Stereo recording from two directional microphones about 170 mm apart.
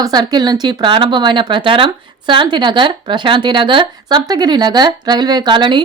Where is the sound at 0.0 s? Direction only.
25° right (ahead or behind).